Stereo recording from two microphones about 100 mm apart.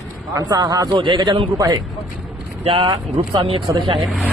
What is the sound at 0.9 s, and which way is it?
Speech, 55° right (ahead or behind).